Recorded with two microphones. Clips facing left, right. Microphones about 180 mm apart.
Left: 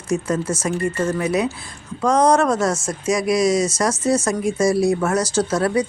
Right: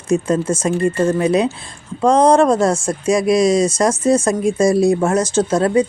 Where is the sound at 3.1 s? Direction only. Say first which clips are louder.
Right 4 dB; 25° right (ahead or behind).